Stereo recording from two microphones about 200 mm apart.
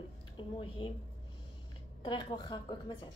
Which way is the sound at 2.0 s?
20° left (ahead or behind).